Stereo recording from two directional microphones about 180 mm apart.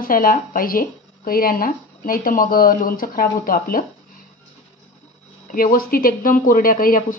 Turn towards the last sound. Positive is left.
turn(degrees=50)  # may be behind; listen again after turning